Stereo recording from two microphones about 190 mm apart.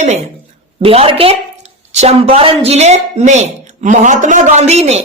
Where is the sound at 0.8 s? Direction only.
30° right (ahead or behind).